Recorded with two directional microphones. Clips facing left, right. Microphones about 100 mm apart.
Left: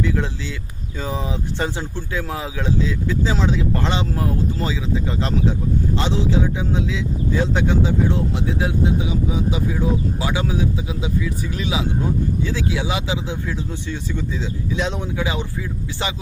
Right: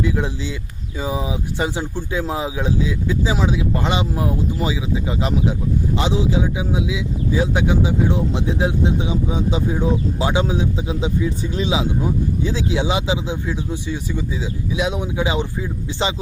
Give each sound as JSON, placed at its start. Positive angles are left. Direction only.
{"t": 0.0, "sound": "speech", "side_deg": -15}